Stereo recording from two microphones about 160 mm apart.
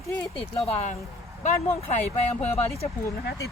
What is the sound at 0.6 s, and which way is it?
Speech, 40° left (ahead or behind).